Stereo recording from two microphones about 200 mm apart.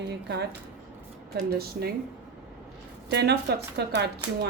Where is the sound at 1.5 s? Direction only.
50° right (ahead or behind).